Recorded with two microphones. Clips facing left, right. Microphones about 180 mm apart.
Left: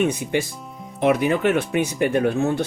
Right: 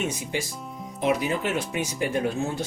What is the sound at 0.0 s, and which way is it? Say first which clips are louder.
Speech: left 8 dB; 60° left (ahead or behind).